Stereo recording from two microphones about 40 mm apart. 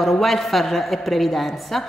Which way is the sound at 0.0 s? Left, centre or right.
Centre.